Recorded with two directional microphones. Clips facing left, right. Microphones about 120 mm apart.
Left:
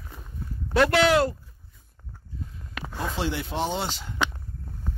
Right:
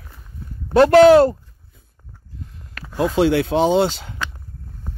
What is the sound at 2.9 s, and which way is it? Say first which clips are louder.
Speech: right 13 dB; 90° right.